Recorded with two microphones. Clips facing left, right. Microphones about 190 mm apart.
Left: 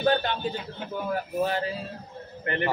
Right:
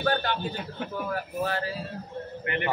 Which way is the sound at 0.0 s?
20° left (ahead or behind).